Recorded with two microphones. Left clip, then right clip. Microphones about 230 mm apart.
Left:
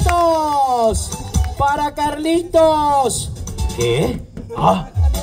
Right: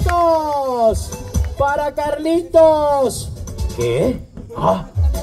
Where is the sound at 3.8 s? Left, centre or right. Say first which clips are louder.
Even; left.